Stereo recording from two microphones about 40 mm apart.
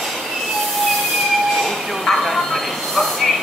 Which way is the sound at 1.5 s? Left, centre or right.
Centre.